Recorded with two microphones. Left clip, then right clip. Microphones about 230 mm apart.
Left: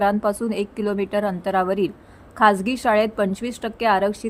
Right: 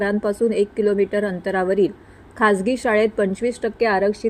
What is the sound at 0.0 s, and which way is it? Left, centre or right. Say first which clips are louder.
A woman's voice: even; centre.